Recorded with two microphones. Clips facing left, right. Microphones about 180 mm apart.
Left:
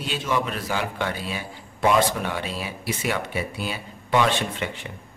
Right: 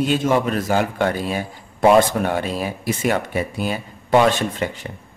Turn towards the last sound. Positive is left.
turn(degrees=-40)  # may be behind; listen again after turning